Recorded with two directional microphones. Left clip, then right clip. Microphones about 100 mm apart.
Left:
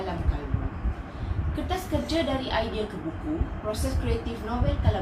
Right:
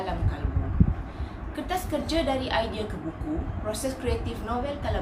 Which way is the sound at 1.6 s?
15° right (ahead or behind).